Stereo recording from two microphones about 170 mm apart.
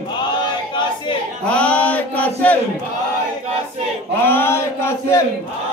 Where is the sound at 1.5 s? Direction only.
5° left (ahead or behind).